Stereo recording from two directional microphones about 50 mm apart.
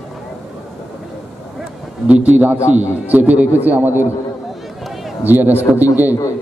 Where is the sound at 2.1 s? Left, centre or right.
Right.